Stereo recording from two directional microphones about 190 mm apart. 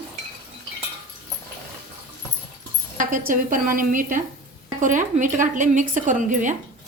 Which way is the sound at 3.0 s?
45° right (ahead or behind).